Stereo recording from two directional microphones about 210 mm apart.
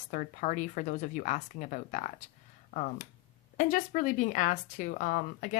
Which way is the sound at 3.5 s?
40° left (ahead or behind).